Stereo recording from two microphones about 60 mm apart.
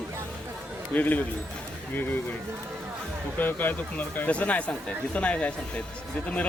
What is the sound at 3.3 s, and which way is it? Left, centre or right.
Speech, left.